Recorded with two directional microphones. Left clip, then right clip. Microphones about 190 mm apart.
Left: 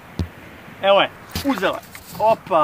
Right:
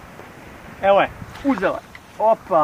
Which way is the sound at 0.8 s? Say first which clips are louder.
Even; 30° right (ahead or behind).